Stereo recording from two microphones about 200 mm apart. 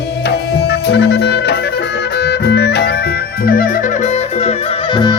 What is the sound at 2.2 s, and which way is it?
Music, 55° left (ahead or behind).